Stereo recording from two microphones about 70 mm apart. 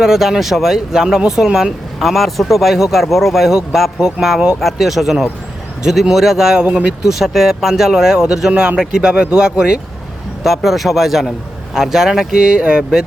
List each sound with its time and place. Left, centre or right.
0.0 s speech: centre
6.7 s speech: centre
7.1 s speech: centre